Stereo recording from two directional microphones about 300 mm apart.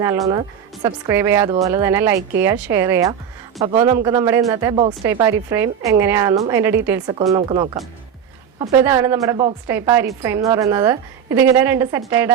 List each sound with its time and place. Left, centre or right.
0.0 s a woman's voice: centre